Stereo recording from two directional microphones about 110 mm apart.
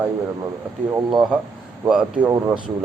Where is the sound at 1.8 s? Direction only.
10° right (ahead or behind).